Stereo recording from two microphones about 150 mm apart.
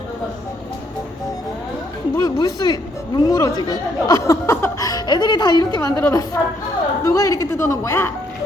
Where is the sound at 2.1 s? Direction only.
25° left (ahead or behind).